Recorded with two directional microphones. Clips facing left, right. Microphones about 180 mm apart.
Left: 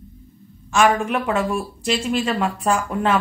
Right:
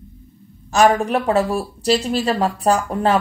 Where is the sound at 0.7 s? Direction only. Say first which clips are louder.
Right 3 dB; 35° right (ahead or behind).